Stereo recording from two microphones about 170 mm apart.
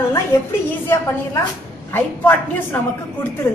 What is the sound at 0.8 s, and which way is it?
A woman's voice, 15° left (ahead or behind).